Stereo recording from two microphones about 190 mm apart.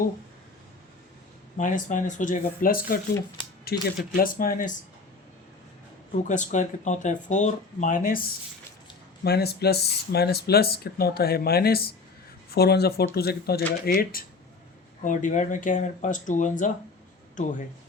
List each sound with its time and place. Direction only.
1.5 s speech: 40° left (ahead or behind)
6.1 s speech: 40° left (ahead or behind)